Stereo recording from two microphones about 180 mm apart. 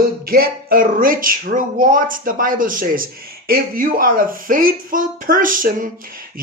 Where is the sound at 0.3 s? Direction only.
55° right (ahead or behind).